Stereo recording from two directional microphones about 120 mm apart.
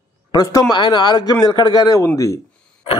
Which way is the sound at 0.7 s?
40° left (ahead or behind).